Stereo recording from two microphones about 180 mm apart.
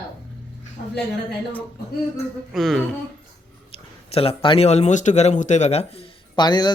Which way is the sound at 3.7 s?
30° left (ahead or behind).